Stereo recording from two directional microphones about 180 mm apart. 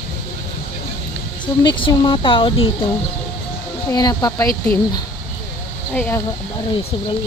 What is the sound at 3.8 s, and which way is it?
Speech, 20° left (ahead or behind).